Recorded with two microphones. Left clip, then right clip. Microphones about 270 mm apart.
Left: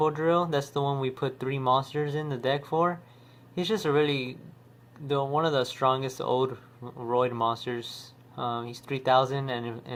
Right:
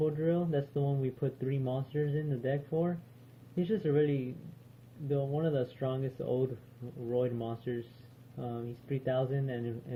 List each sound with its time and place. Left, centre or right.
0.0 s speech: left